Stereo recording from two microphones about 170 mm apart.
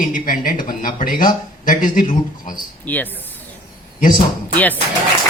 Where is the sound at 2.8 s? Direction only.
10° left (ahead or behind).